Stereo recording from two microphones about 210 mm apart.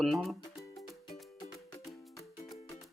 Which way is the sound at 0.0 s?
Centre (ahead or behind).